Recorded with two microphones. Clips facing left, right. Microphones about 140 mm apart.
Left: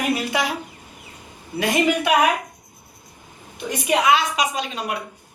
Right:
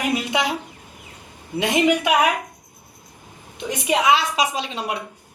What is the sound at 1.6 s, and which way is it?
Speech, 20° right (ahead or behind).